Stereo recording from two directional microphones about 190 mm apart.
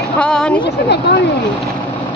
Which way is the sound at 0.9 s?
60° left (ahead or behind).